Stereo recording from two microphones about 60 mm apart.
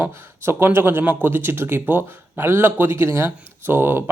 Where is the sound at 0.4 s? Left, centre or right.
Right.